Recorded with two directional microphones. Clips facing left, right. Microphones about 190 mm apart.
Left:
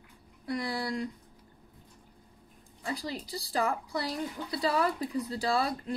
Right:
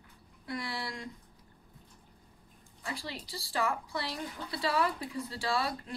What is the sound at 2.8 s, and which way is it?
Speech, 35° left (ahead or behind).